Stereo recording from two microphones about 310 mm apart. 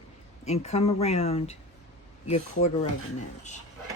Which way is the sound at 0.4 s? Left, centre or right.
Left.